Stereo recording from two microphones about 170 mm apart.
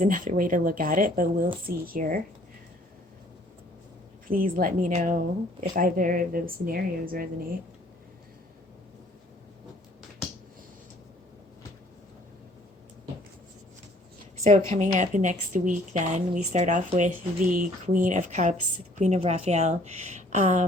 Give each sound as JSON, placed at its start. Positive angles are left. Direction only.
{"t": 0.0, "sound": "speech", "side_deg": -50}
{"t": 4.3, "sound": "speech", "side_deg": -55}
{"t": 14.8, "sound": "speech", "side_deg": -45}